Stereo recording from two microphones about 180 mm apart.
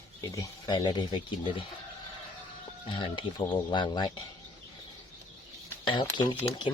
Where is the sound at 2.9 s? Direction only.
25° left (ahead or behind).